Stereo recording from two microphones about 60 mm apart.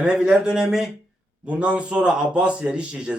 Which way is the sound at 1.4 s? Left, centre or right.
Centre.